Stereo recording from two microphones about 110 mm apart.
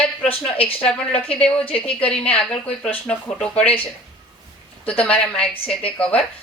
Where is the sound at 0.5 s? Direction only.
60° left (ahead or behind).